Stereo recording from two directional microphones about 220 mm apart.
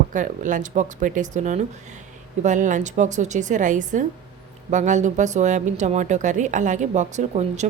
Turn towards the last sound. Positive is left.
turn(degrees=-30)  # may be behind; listen again after turning